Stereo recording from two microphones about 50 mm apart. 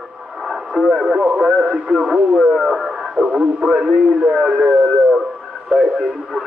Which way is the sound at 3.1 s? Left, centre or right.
Centre.